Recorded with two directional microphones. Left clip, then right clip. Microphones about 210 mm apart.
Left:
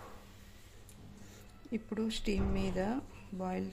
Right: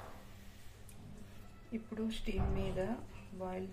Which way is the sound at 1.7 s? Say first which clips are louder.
Left 4 dB; 50° left (ahead or behind).